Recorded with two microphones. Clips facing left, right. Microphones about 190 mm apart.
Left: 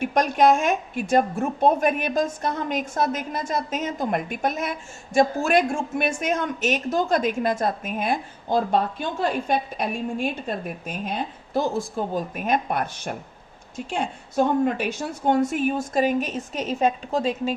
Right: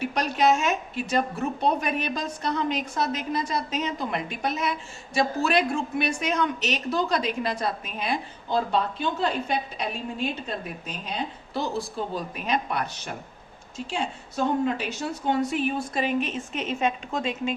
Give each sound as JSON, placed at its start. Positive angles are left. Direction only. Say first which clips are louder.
{"t": 0.0, "sound": "a woman's voice", "louder": "left 4 dB", "side_deg": 50}